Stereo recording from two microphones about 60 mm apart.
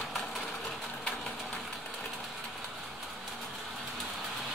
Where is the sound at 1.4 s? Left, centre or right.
Centre.